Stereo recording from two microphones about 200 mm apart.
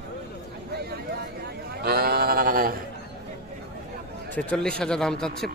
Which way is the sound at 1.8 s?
50° right (ahead or behind).